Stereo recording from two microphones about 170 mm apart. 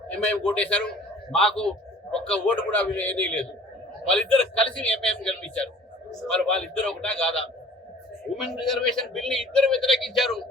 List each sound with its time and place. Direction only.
0.1 s a man's voice: 10° left (ahead or behind)